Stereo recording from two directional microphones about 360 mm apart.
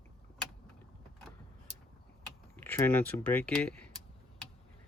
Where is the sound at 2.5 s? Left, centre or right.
Centre.